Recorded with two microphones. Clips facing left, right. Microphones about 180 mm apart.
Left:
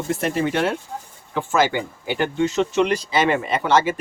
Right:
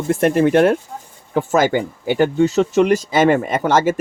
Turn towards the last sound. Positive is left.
turn(degrees=-45)  # may be behind; listen again after turning